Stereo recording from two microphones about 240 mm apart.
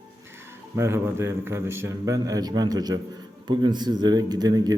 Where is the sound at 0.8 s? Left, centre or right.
Centre.